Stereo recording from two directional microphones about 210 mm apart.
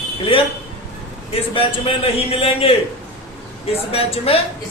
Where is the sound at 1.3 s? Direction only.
25° left (ahead or behind).